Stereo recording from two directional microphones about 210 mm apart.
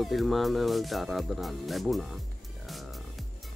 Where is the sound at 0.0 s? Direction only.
Centre (ahead or behind).